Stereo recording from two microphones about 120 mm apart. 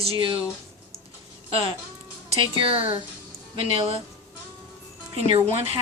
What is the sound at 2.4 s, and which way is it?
Speech, 50° right (ahead or behind).